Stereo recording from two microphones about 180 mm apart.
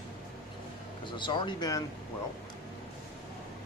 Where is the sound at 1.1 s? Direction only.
25° left (ahead or behind).